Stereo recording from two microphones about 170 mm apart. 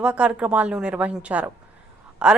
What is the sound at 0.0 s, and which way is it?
Speech, 5° right (ahead or behind).